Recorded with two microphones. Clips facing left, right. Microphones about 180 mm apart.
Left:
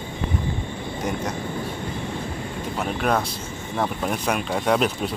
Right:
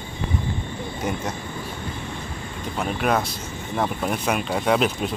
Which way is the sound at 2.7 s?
Centre (ahead or behind).